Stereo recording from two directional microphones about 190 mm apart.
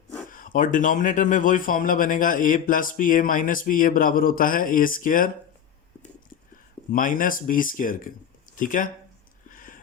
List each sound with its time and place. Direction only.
0.3 s speech: 45° left (ahead or behind)
6.9 s speech: 45° left (ahead or behind)
9.5 s a sound: 45° left (ahead or behind)